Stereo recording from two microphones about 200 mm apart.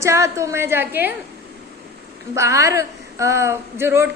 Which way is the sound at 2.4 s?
15° right (ahead or behind).